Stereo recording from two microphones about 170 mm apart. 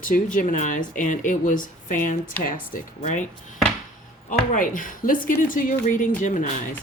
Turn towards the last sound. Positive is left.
turn(degrees=45)  # may be behind; listen again after turning